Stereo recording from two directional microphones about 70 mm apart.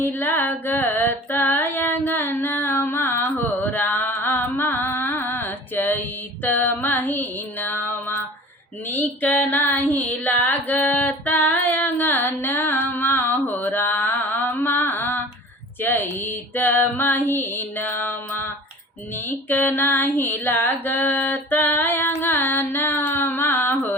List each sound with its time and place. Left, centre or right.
0.0 s mantra: left
4.9 s music: left
8.9 s female singing: left
22.1 s music: left